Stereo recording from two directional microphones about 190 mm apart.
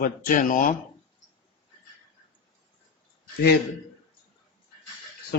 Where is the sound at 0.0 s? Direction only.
45° left (ahead or behind).